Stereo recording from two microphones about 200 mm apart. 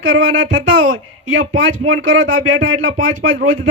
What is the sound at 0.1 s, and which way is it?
Speech, 75° right (ahead or behind).